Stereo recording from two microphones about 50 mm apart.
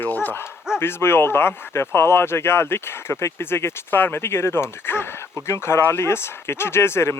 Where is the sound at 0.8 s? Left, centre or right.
Left.